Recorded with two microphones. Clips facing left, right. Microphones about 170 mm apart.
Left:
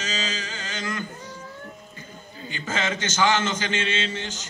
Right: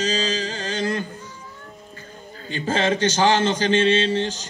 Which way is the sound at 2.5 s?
35° right (ahead or behind).